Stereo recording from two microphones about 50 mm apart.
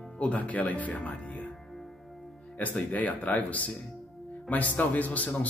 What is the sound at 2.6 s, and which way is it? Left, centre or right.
Speech, left.